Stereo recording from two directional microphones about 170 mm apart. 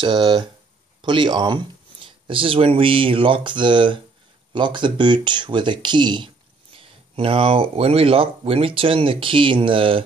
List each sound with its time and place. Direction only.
0.0 s speech: 25° right (ahead or behind)